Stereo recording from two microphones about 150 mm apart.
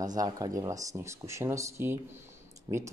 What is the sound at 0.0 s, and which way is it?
A man's voice, 25° right (ahead or behind).